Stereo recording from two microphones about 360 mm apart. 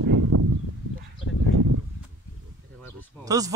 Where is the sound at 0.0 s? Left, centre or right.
Right.